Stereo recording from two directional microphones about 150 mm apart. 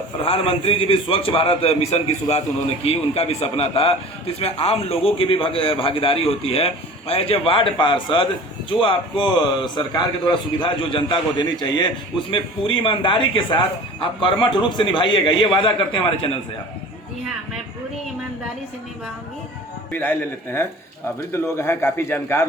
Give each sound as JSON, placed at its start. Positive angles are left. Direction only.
{"t": 0.2, "sound": "a man's voice", "side_deg": 40}
{"t": 19.9, "sound": "a man's voice", "side_deg": 15}